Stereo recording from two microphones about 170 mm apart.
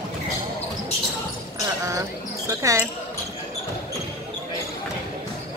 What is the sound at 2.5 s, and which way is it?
Basketball bounce, 15° right (ahead or behind).